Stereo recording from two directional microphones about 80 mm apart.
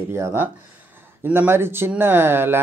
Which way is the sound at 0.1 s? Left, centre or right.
Right.